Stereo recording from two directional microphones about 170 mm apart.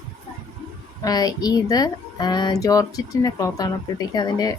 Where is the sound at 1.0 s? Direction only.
25° left (ahead or behind).